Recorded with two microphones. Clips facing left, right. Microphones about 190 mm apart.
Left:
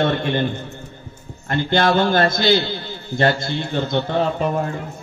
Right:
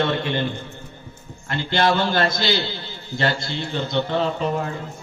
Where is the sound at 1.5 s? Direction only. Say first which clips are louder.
Left 3 dB; 50° left (ahead or behind).